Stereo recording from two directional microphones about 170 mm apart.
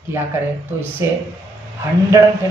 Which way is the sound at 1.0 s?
15° right (ahead or behind).